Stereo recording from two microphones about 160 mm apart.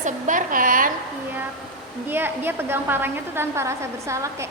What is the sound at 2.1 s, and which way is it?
A woman's voice, 15° right (ahead or behind).